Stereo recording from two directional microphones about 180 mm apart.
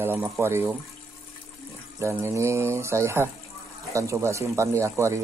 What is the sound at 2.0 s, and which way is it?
Speech, 15° right (ahead or behind).